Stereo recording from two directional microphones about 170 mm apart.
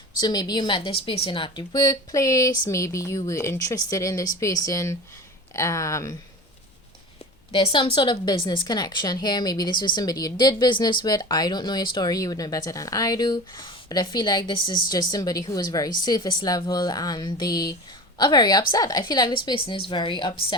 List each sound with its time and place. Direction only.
0.2 s speech: 25° left (ahead or behind)
7.5 s speech: 30° left (ahead or behind)